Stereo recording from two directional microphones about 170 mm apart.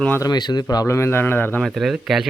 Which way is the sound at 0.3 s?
25° left (ahead or behind).